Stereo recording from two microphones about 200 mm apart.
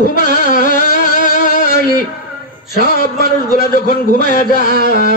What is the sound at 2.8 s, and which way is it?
A man's voice, 45° left (ahead or behind).